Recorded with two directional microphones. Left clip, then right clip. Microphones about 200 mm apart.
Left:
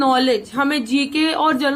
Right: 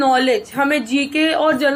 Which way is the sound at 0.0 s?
25° left (ahead or behind).